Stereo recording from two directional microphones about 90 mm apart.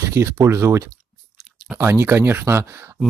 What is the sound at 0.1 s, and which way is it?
Speech, 30° right (ahead or behind).